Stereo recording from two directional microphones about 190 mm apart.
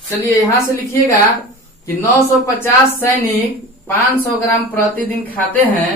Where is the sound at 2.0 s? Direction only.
15° left (ahead or behind).